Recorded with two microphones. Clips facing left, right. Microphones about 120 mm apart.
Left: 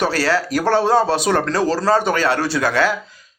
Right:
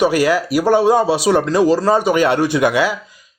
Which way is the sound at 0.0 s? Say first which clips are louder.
Right 4 dB; 15° right (ahead or behind).